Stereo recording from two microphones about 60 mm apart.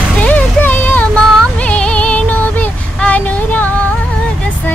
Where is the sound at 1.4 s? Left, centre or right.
Left.